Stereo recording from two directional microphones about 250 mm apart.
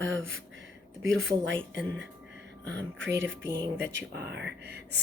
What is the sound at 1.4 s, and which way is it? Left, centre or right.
Speech, right.